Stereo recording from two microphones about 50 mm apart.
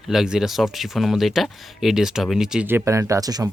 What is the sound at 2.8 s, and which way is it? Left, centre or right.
Speech, right.